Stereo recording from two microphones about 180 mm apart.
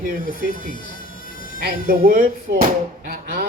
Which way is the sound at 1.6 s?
50° right (ahead or behind).